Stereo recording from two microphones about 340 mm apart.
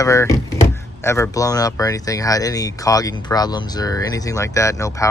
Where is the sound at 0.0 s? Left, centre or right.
Centre.